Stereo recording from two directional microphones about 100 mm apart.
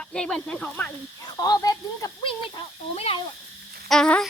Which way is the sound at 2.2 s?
60° left (ahead or behind).